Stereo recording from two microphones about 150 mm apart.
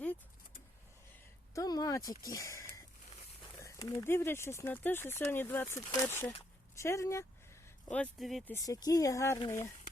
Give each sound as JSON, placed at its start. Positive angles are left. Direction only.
{"t": 1.5, "sound": "a sound", "side_deg": 25}
{"t": 3.6, "sound": "speech", "side_deg": 20}
{"t": 7.9, "sound": "speech", "side_deg": 5}
{"t": 8.4, "sound": "speech", "side_deg": 20}